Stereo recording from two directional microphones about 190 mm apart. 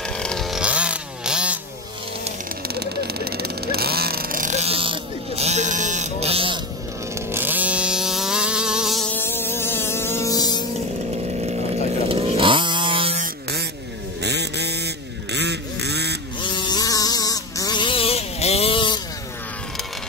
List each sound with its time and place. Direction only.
0.2 s chainsaw: centre (ahead or behind)
2.7 s vehicle: 55° right (ahead or behind); by 6.6 s 30° right (ahead or behind)
7.2 s chainsaw: 10° right (ahead or behind); by 10.6 s 20° left (ahead or behind)
11.4 s chainsaw: 30° right (ahead or behind)
13.2 s buzz: 60° right (ahead or behind)
14.2 s a sound: 60° right (ahead or behind)
16.3 s a sound: 25° left (ahead or behind)